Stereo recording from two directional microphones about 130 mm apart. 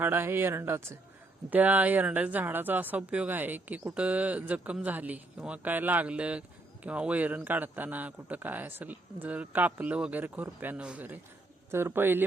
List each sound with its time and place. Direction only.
0.0 s speech: 15° right (ahead or behind)